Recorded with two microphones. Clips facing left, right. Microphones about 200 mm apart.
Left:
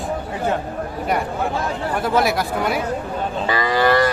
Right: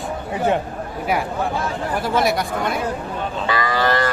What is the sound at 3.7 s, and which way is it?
Cattle, 10° left (ahead or behind).